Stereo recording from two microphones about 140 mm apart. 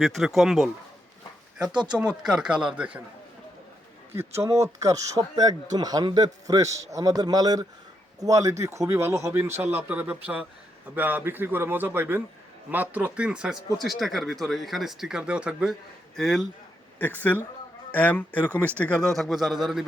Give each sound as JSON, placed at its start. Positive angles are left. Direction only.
{"t": 0.0, "sound": "a man's voice", "side_deg": 0}
{"t": 4.4, "sound": "a man's voice", "side_deg": -25}
{"t": 17.0, "sound": "speech", "side_deg": 10}